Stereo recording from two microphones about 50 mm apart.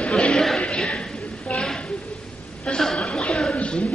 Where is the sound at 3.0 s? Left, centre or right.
Left.